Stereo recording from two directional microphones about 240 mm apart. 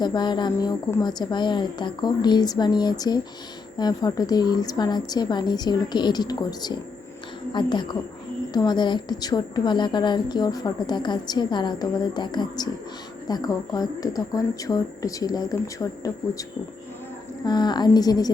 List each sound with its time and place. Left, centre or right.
0.0 s a woman's voice: centre